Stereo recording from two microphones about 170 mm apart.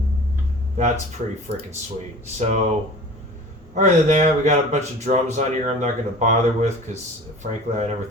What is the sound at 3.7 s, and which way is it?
Speech, 45° right (ahead or behind).